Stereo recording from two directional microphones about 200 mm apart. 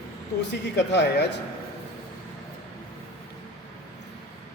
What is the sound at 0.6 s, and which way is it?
Speech, 60° left (ahead or behind).